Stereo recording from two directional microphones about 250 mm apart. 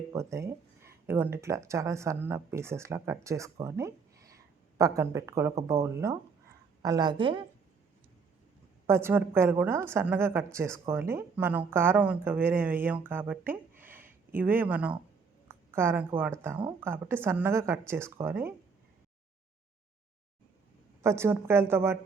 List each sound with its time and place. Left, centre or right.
0.1 s speech: centre
8.9 s a woman's voice: centre
21.0 s speech: centre